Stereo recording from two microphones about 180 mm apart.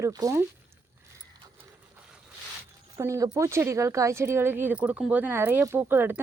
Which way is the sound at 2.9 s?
15° right (ahead or behind).